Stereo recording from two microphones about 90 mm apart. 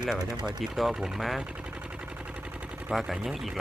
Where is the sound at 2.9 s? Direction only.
5° right (ahead or behind).